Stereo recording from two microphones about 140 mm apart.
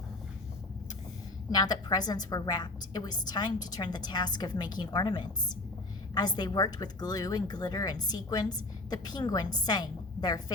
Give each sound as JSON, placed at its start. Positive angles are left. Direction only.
{"t": 1.5, "sound": "speech", "side_deg": 30}